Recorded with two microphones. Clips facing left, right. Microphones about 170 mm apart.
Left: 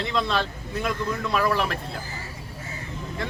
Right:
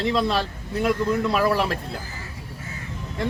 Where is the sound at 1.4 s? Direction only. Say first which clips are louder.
Right 3 dB; 35° right (ahead or behind).